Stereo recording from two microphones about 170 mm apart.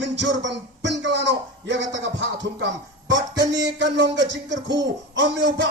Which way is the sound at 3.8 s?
90° right.